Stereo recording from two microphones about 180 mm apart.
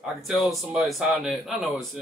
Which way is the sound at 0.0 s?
Centre (ahead or behind).